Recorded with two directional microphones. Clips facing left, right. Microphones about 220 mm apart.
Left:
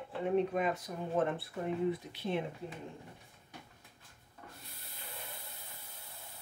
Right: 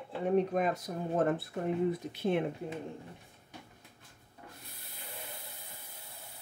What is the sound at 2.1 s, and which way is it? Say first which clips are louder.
Speech: right 5 dB; 50° right (ahead or behind).